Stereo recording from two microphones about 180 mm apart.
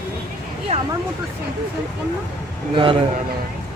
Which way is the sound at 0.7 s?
35° right (ahead or behind).